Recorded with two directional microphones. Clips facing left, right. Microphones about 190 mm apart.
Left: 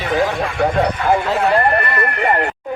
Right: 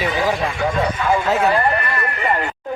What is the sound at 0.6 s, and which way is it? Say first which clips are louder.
Speech: left 3 dB; 60° left (ahead or behind).